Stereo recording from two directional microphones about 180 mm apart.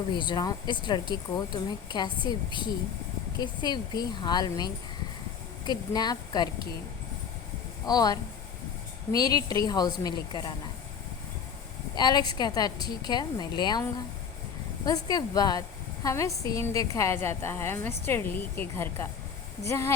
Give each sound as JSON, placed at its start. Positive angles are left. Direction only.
{"t": 0.1, "sound": "speech", "side_deg": 25}
{"t": 7.9, "sound": "speech", "side_deg": 20}
{"t": 11.9, "sound": "speech", "side_deg": 25}
{"t": 14.8, "sound": "a woman's voice", "side_deg": 20}